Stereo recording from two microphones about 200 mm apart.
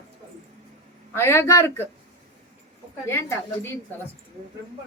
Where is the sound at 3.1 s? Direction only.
15° left (ahead or behind).